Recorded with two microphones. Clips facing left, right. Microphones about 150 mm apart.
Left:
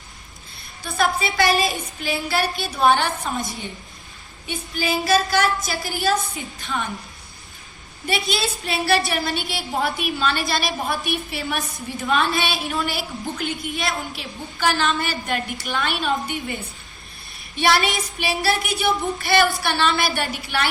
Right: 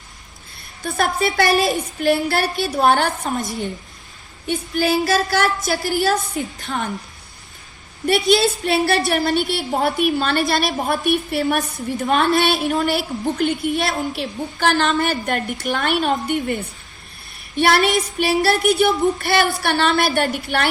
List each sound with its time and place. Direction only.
0.9 s a woman's voice: 55° right (ahead or behind)
4.4 s a woman's voice: 55° right (ahead or behind)
8.0 s a woman's voice: 55° right (ahead or behind)